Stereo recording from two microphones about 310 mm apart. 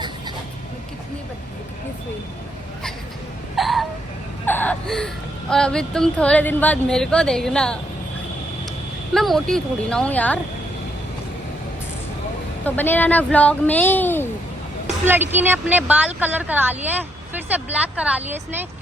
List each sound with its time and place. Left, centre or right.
3.5 s hiccup: centre
4.4 s speech: centre
9.1 s speech: centre
12.6 s speech: centre
15.0 s speech: centre